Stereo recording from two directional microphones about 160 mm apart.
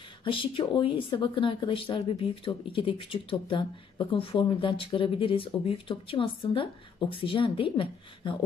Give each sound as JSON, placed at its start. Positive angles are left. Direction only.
{"t": 0.2, "sound": "speech", "side_deg": 35}